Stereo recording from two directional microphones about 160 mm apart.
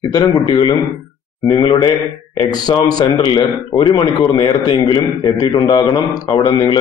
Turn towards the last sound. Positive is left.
turn(degrees=30)  # may be behind; listen again after turning